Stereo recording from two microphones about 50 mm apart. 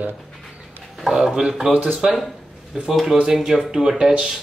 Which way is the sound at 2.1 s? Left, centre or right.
Centre.